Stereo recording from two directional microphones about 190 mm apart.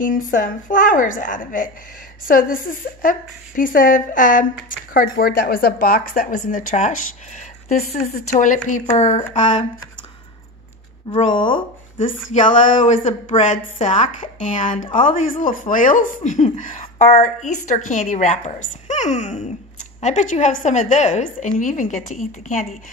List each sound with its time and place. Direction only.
0.0 s a woman's voice: 45° left (ahead or behind)
11.2 s speech: 25° left (ahead or behind)
12.8 s a woman's voice: 30° left (ahead or behind)